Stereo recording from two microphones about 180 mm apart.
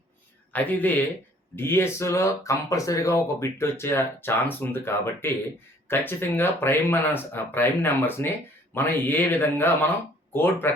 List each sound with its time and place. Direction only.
0.5 s speech: 10° left (ahead or behind)